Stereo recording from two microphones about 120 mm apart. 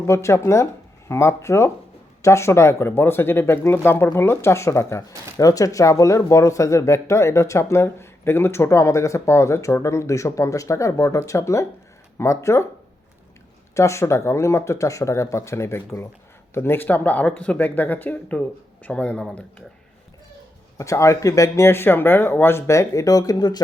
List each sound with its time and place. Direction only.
0.1 s speech: 25° left (ahead or behind)
13.7 s speech: 25° left (ahead or behind)
20.7 s speech: 25° left (ahead or behind)